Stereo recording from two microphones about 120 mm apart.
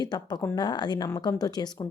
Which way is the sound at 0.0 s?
35° left (ahead or behind).